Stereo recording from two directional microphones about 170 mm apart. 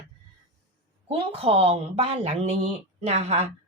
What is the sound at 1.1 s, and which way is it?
A woman's voice, 35° right (ahead or behind).